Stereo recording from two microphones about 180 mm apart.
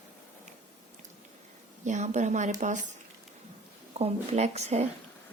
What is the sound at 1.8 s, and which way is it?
A woman's voice, 40° right (ahead or behind).